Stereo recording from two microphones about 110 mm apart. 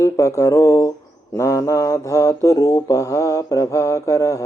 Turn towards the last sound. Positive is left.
turn(degrees=30)  # may be behind; listen again after turning